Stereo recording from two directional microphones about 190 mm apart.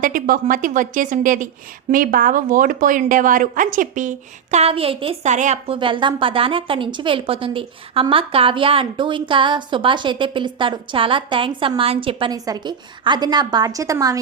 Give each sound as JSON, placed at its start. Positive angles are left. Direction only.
{"t": 0.0, "sound": "a woman's voice", "side_deg": -45}
{"t": 4.5, "sound": "a woman's voice", "side_deg": -30}